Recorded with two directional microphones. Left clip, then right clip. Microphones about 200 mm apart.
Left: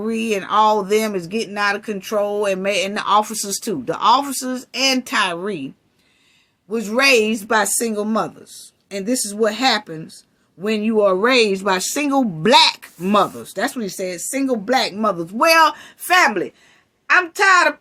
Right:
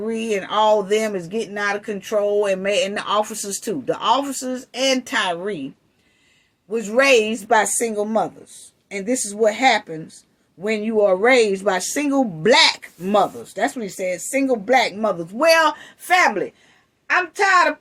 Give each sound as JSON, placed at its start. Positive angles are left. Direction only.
{"t": 0.1, "sound": "speech", "side_deg": 45}
{"t": 6.7, "sound": "a woman's voice", "side_deg": 40}